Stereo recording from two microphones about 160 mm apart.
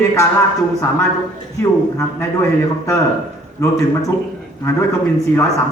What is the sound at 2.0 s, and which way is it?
A man's voice, 20° left (ahead or behind).